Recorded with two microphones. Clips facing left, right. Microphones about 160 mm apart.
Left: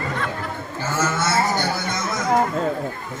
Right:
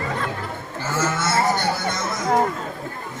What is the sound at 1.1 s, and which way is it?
Speech, 25° left (ahead or behind).